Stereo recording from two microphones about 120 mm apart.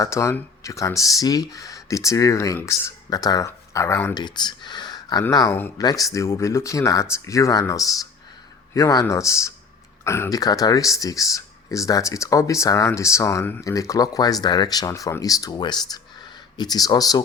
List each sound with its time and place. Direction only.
0.0 s speech: 25° left (ahead or behind)
4.1 s speech: 40° left (ahead or behind)